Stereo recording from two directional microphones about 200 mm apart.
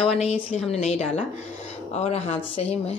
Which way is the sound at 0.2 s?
30° left (ahead or behind).